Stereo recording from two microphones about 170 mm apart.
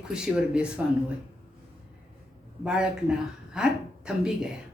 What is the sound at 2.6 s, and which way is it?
A woman's voice, 5° right (ahead or behind).